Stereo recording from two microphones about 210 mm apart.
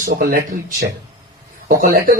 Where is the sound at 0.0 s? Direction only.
40° right (ahead or behind).